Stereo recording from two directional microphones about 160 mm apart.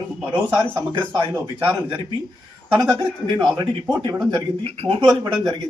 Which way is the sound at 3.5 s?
30° right (ahead or behind).